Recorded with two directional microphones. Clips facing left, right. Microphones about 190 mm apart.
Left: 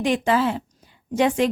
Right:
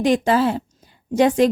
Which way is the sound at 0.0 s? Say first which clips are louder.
Right 3 dB; 40° right (ahead or behind).